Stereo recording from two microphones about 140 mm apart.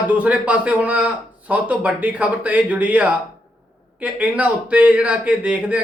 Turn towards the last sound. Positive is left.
turn(degrees=-10)  # may be behind; listen again after turning